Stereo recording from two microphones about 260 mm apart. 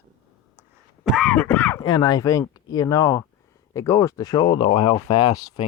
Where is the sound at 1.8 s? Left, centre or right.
Centre.